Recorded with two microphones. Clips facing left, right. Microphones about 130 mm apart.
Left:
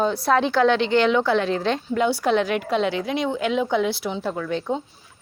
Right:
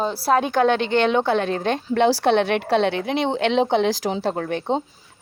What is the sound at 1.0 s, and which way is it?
Speech, 25° right (ahead or behind).